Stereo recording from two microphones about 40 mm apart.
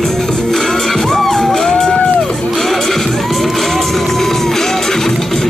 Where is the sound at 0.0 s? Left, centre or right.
Centre.